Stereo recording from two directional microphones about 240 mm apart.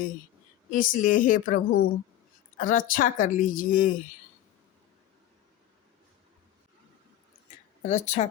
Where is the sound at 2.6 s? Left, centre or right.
Left.